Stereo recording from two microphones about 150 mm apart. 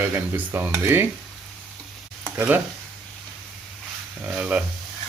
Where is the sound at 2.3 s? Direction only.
5° right (ahead or behind).